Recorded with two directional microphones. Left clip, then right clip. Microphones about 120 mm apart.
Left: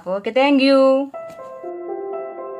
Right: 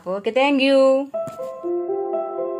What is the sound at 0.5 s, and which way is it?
Speech, centre (ahead or behind).